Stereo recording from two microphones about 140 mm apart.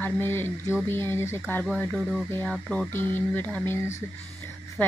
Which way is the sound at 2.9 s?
15° left (ahead or behind).